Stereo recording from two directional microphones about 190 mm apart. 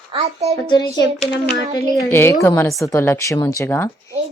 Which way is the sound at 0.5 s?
25° left (ahead or behind).